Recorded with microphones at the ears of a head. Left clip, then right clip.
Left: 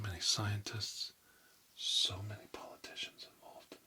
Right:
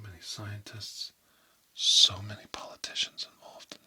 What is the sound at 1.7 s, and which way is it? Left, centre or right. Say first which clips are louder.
Speech: right 12 dB; right.